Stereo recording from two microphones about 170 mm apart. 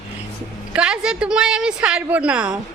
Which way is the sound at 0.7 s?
5° right (ahead or behind).